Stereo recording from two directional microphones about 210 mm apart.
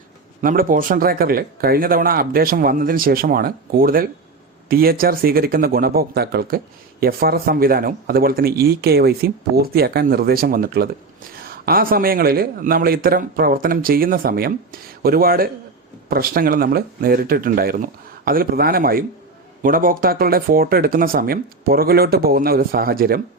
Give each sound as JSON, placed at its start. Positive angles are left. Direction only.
{"t": 0.4, "sound": "speech", "side_deg": -40}